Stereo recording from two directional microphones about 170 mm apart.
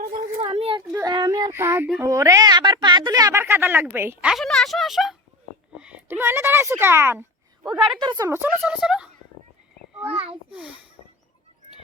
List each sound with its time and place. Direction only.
0.1 s a sound: 35° right (ahead or behind)
0.9 s a sound: 25° right (ahead or behind)
2.0 s a woman's voice: 20° right (ahead or behind)
4.3 s speech: centre (ahead or behind); by 7.3 s 15° right (ahead or behind)
7.6 s a woman's voice: 5° right (ahead or behind)
7.9 s a woman's voice: 25° right (ahead or behind)
8.6 s speech: 5° right (ahead or behind)
10.1 s a child's voice: 35° right (ahead or behind)